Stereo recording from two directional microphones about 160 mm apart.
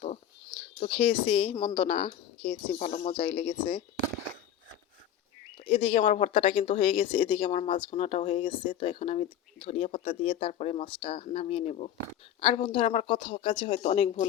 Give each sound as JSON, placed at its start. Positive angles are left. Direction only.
{"t": 0.8, "sound": "speech", "side_deg": 40}
{"t": 2.7, "sound": "speech", "side_deg": 45}
{"t": 5.5, "sound": "speech", "side_deg": 35}